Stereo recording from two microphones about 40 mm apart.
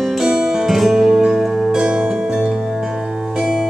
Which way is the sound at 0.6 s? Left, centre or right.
Centre.